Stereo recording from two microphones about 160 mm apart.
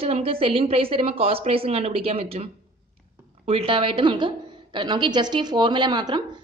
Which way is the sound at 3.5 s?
35° right (ahead or behind).